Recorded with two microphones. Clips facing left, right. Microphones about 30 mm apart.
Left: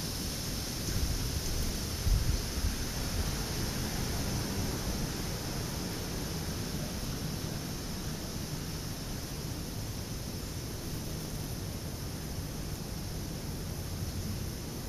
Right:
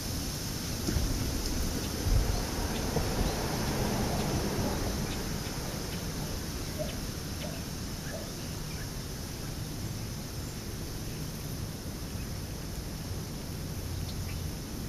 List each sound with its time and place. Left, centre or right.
0.9 s thunder: centre
2.2 s a sound: centre
5.2 s pink noise: centre